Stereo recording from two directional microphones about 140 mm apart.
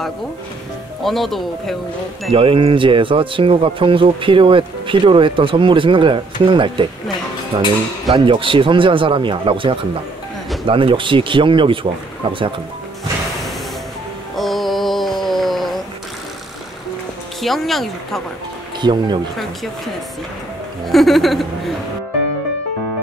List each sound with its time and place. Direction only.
1.0 s speech: centre (ahead or behind)
2.3 s speech: 40° right (ahead or behind)
14.3 s music: centre (ahead or behind)
17.4 s speech: centre (ahead or behind)
18.8 s speech: 30° right (ahead or behind)
20.8 s speech: centre (ahead or behind)